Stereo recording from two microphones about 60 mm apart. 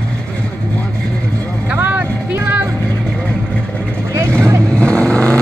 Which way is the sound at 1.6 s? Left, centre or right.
Right.